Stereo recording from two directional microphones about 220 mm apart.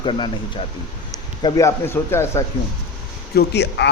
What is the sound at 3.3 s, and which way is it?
Speech, 50° left (ahead or behind).